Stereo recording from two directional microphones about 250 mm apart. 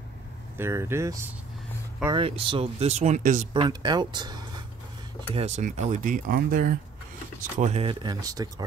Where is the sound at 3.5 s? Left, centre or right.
Centre.